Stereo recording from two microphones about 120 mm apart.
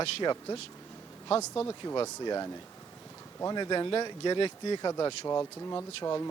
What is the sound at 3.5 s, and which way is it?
Speech, 35° left (ahead or behind).